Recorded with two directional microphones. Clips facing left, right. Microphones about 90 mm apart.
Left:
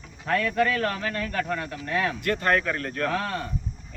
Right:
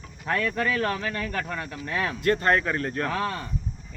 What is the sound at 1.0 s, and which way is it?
Speech, 5° right (ahead or behind).